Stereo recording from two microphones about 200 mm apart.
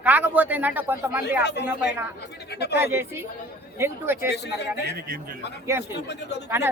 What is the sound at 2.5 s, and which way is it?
Speech, 55° left (ahead or behind).